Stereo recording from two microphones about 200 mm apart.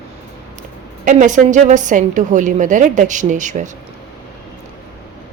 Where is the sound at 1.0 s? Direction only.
40° right (ahead or behind).